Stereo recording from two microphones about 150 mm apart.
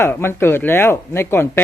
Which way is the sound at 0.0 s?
15° left (ahead or behind).